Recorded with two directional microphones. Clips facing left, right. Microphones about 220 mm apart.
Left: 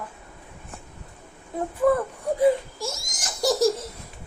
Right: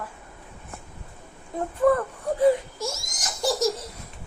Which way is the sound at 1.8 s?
5° left (ahead or behind).